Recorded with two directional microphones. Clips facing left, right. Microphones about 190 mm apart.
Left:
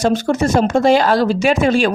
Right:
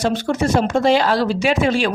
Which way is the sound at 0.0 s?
45° left (ahead or behind).